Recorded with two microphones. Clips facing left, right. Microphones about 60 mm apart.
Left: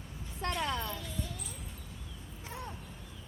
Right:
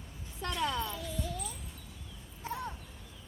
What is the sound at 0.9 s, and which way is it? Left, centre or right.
Music, centre.